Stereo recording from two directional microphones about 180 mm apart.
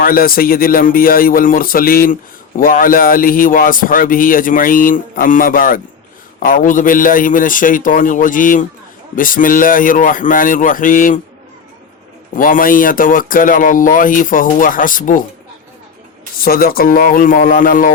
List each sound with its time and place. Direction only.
0.0 s a man's voice: 55° left (ahead or behind)
12.4 s a man's voice: 50° left (ahead or behind)
16.4 s a man's voice: 55° left (ahead or behind)